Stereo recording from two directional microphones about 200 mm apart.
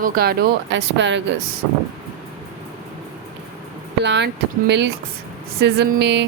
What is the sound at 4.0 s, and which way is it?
Speech, 60° right (ahead or behind).